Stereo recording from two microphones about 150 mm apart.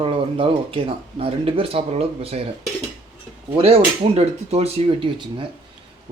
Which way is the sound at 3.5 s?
40° right (ahead or behind).